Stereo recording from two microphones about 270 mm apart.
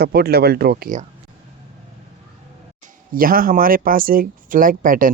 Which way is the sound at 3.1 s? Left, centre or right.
Right.